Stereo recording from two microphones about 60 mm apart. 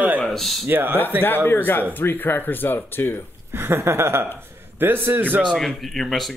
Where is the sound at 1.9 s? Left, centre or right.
Left.